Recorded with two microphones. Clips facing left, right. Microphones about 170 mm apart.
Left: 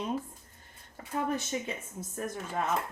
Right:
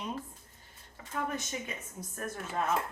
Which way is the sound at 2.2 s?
15° left (ahead or behind).